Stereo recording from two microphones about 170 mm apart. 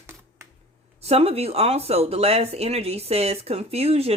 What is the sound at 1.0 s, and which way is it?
Speech, 35° right (ahead or behind).